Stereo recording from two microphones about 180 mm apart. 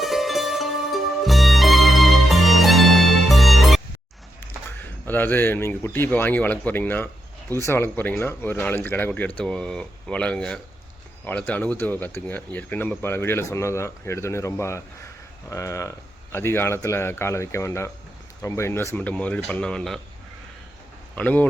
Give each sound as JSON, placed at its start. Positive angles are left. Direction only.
{"t": 0.0, "sound": "music", "side_deg": 0}
{"t": 4.4, "sound": "speech", "side_deg": 10}
{"t": 21.2, "sound": "speech", "side_deg": 10}